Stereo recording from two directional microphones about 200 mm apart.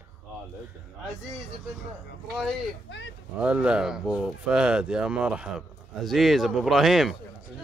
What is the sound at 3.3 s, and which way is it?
Speech, 5° right (ahead or behind).